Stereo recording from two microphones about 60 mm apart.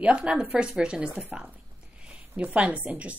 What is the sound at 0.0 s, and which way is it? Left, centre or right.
A woman's voice, centre.